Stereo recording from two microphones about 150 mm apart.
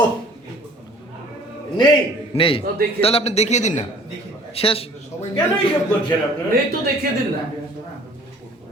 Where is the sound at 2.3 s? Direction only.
40° left (ahead or behind).